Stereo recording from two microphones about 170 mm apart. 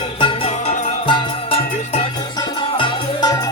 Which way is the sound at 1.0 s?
30° left (ahead or behind).